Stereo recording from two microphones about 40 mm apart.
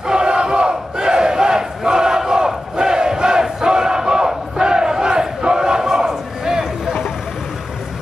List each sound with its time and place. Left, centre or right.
0.0 s battle cry: centre